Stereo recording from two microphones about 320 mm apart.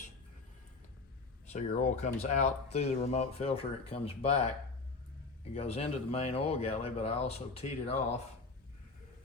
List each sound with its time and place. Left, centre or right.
1.5 s speech: left
5.5 s speech: centre